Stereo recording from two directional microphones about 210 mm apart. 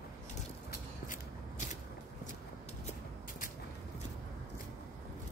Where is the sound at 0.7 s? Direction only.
40° left (ahead or behind).